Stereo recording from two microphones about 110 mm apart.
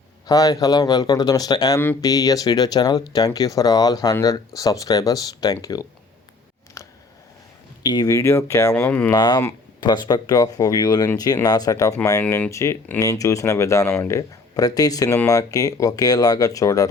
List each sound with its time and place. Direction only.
0.3 s speech: 35° left (ahead or behind)
6.8 s scissors: 30° left (ahead or behind)
7.9 s speech: 35° left (ahead or behind)
8.7 s speech: 15° left (ahead or behind)
9.1 s speech: 40° left (ahead or behind)
12.2 s speech: 15° left (ahead or behind)
12.5 s speech: 25° left (ahead or behind)